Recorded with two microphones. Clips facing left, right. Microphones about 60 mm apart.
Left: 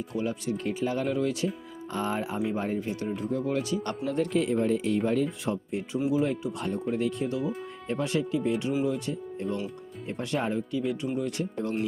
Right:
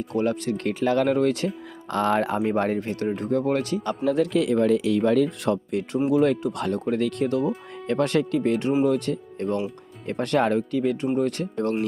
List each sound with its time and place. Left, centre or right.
0.1 s speech: right
1.9 s speech: right
4.3 s speech: right